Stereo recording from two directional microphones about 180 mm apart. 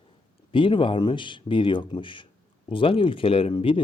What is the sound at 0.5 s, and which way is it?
Speech, 30° left (ahead or behind).